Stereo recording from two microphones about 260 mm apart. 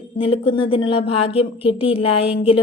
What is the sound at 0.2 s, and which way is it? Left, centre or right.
Speech, left.